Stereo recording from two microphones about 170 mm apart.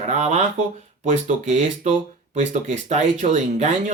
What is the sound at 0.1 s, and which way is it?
Speech, 40° right (ahead or behind).